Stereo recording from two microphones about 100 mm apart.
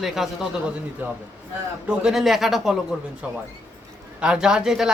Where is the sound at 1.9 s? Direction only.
5° right (ahead or behind).